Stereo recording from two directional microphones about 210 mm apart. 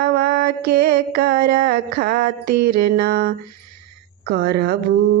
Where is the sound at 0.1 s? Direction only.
50° right (ahead or behind).